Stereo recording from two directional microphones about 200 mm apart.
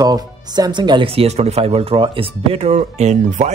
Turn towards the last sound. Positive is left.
turn(degrees=-35)  # may be behind; listen again after turning